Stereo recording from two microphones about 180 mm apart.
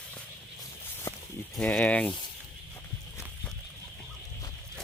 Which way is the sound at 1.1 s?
15° left (ahead or behind).